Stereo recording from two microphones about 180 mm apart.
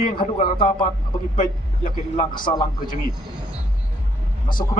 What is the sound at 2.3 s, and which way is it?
Speech, 25° left (ahead or behind).